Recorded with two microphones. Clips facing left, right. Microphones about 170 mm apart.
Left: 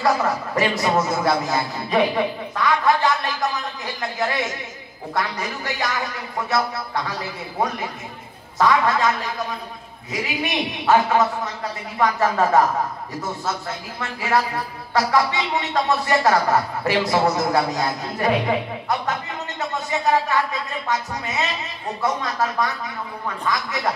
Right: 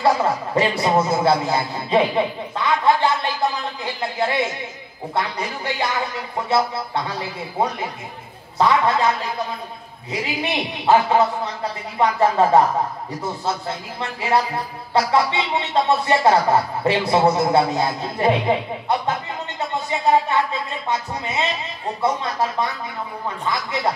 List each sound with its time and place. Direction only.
0.0 s a man's voice: 30° right (ahead or behind)
8.5 s a man's voice: 30° right (ahead or behind)